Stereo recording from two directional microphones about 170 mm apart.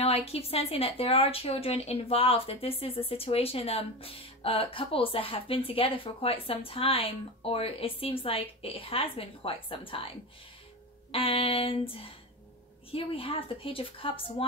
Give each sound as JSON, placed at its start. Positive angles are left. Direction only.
{"t": 0.0, "sound": "a woman's voice", "side_deg": 35}